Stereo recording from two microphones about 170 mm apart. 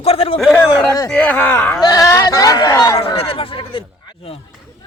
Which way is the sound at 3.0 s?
35° left (ahead or behind).